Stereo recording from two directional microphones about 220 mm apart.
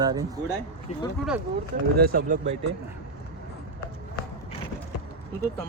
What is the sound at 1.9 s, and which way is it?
Speech, 40° right (ahead or behind).